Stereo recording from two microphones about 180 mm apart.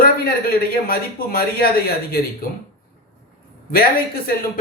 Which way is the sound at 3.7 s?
55° left (ahead or behind).